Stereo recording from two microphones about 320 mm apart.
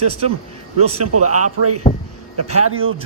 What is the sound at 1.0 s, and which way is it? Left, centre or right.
Speech, right.